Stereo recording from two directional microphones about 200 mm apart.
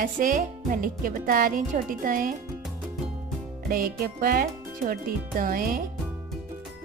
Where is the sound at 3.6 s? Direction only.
45° right (ahead or behind).